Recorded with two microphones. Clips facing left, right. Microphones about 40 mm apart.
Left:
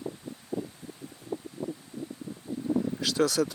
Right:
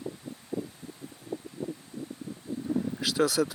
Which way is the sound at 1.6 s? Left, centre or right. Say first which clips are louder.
Left 1 dB; left.